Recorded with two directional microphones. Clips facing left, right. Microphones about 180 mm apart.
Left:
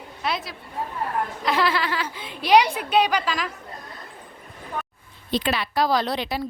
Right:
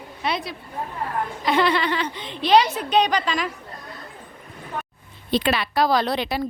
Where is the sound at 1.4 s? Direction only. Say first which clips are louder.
Right 3 dB; centre (ahead or behind).